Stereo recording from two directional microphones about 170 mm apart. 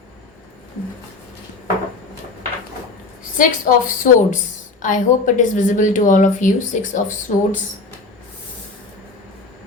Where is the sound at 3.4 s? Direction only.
50° left (ahead or behind).